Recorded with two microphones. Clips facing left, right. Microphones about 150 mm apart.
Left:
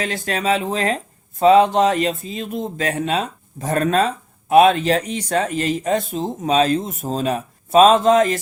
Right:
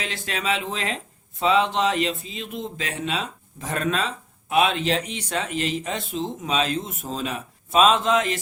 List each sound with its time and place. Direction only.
0.0 s speech: 45° left (ahead or behind)